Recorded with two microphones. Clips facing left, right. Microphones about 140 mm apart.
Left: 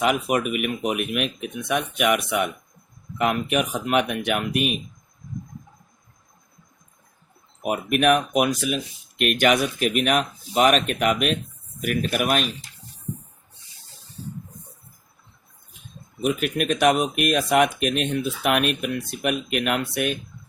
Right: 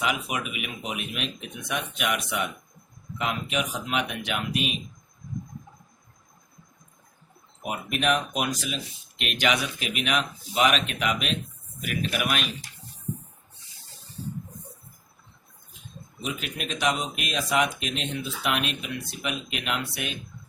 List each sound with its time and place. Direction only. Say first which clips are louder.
0.0 s speech: left 7 dB; 50° left (ahead or behind)
7.6 s speech: left 7 dB; 55° left (ahead or behind); by 12.5 s 40° left (ahead or behind)
16.2 s speech: left 10 dB; 55° left (ahead or behind)